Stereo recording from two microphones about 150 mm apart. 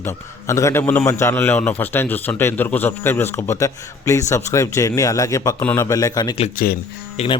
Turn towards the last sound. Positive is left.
turn(degrees=45)  # may be behind; listen again after turning